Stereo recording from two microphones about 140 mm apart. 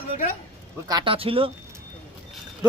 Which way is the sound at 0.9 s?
30° right (ahead or behind).